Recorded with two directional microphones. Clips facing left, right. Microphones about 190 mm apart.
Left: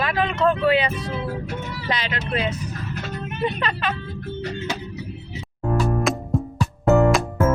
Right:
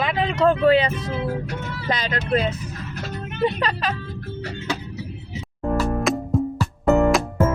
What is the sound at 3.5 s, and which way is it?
Speech, 35° right (ahead or behind).